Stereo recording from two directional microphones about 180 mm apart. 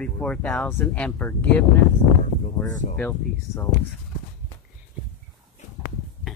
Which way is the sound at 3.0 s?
15° left (ahead or behind).